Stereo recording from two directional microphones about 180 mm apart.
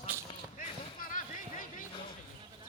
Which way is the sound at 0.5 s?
50° left (ahead or behind).